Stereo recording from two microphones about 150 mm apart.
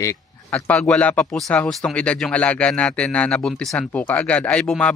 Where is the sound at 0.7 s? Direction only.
5° left (ahead or behind).